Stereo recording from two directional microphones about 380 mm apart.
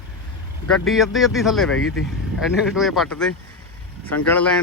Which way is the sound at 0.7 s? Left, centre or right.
Centre.